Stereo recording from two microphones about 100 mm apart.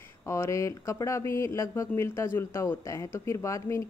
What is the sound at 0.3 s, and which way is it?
Speech, 30° left (ahead or behind).